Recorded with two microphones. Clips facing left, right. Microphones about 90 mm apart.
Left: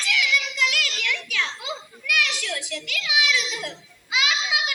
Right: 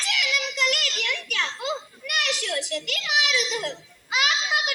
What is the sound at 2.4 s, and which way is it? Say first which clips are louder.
A child's voice: right 3 dB; 45° right (ahead or behind).